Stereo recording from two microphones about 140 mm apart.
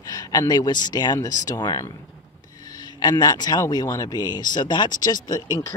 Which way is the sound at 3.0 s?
30° left (ahead or behind).